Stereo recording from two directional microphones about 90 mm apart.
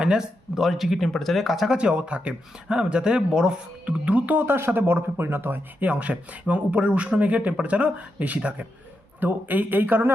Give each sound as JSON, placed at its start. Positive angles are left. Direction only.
{"t": 0.0, "sound": "speech", "side_deg": -5}